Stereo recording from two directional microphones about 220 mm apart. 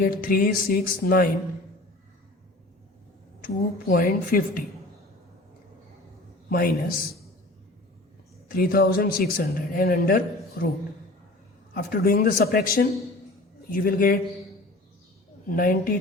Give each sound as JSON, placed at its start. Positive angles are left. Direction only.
{"t": 0.0, "sound": "speech", "side_deg": 40}
{"t": 3.4, "sound": "speech", "side_deg": 40}
{"t": 6.5, "sound": "speech", "side_deg": 40}
{"t": 8.4, "sound": "speech", "side_deg": 40}
{"t": 11.7, "sound": "speech", "side_deg": 40}
{"t": 15.4, "sound": "speech", "side_deg": 40}